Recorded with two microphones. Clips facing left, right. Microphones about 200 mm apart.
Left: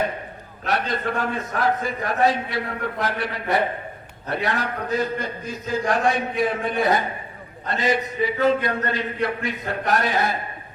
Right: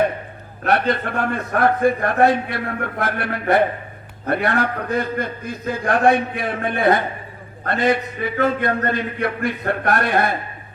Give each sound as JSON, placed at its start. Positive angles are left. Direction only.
{"t": 0.6, "sound": "a man's voice", "side_deg": -55}